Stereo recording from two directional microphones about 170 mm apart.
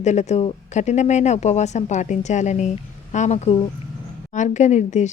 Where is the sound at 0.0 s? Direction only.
45° left (ahead or behind).